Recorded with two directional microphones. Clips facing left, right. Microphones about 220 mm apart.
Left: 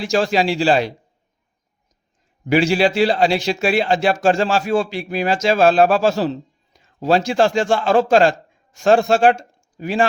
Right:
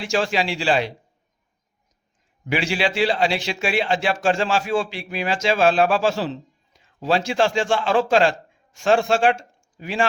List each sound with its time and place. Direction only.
0.0 s a man's voice: 40° left (ahead or behind)
2.5 s a man's voice: 40° left (ahead or behind)